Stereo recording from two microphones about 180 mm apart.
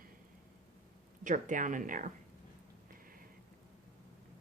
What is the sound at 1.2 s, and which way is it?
Speech, 45° right (ahead or behind).